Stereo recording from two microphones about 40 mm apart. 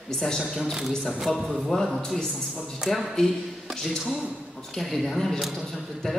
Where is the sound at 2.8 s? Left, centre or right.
Centre.